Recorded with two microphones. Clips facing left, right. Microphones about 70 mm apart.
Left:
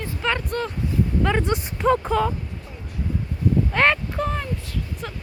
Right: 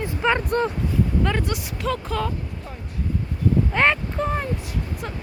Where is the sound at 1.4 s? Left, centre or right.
Left.